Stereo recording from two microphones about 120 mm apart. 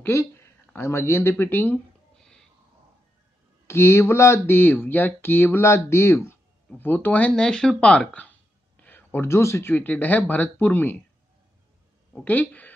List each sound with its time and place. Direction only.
0.0 s speech: 20° left (ahead or behind)
3.6 s speech: 20° left (ahead or behind)
12.1 s a woman's voice: 15° left (ahead or behind)